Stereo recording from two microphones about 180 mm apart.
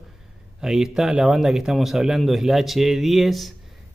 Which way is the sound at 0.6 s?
5° right (ahead or behind).